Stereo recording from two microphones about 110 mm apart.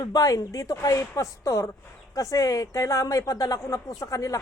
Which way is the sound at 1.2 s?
30° left (ahead or behind).